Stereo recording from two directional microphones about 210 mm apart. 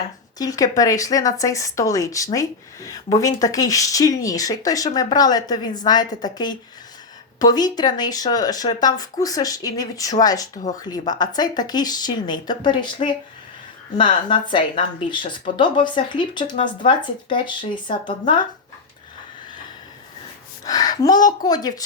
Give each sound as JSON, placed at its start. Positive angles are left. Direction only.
{"t": 0.3, "sound": "speech", "side_deg": 15}
{"t": 20.7, "sound": "speech", "side_deg": 20}